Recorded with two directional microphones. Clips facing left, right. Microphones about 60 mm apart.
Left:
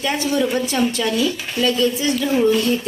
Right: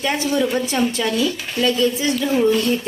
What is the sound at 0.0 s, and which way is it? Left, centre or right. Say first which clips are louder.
A woman's voice: even; right.